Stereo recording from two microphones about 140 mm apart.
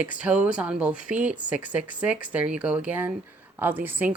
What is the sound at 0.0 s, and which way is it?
A woman's voice, 10° right (ahead or behind).